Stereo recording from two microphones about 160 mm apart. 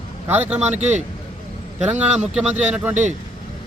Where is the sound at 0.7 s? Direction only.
45° right (ahead or behind).